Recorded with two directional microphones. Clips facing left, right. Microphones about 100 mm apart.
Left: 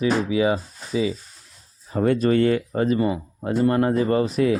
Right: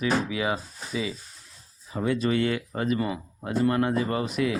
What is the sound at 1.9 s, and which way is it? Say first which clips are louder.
Speech: left 6 dB; 45° left (ahead or behind).